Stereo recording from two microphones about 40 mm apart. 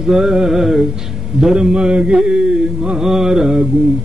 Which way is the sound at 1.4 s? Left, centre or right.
Centre.